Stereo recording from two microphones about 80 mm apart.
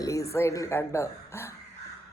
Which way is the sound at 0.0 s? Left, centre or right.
Left.